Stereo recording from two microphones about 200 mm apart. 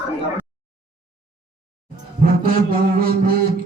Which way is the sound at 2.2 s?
45° right (ahead or behind).